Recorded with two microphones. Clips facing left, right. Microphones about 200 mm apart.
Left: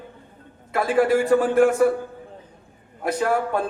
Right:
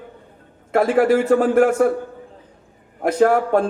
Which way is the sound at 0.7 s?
55° right (ahead or behind).